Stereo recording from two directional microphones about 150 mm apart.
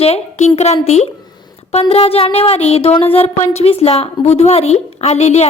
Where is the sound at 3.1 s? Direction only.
45° left (ahead or behind).